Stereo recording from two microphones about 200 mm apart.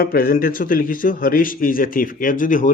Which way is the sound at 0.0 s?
45° left (ahead or behind).